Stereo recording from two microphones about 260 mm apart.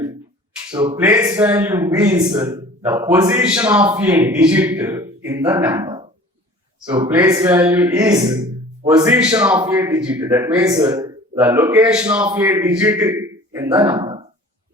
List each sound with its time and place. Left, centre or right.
0.7 s a man's voice: centre